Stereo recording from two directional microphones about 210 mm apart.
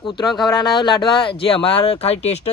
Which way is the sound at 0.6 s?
20° left (ahead or behind).